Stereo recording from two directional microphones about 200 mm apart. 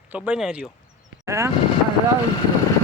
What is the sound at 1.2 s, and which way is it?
Speech, 15° right (ahead or behind).